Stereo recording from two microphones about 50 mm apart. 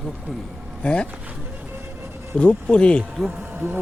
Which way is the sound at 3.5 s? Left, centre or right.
Right.